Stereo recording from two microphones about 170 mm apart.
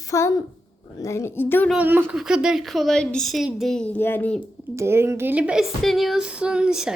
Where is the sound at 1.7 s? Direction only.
10° right (ahead or behind); by 4.4 s 10° left (ahead or behind).